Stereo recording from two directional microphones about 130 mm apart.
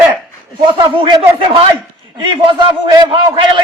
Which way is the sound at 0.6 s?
40° right (ahead or behind).